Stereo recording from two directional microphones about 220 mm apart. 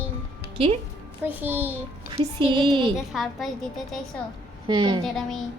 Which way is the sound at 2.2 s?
20° right (ahead or behind).